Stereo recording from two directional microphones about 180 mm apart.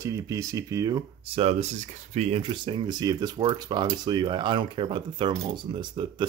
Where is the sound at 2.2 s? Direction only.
35° right (ahead or behind).